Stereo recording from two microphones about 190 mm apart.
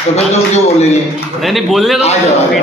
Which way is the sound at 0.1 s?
35° left (ahead or behind).